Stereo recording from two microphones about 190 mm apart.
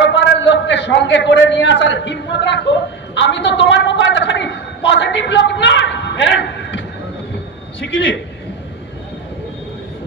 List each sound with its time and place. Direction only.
0.0 s a man's voice: 65° left (ahead or behind)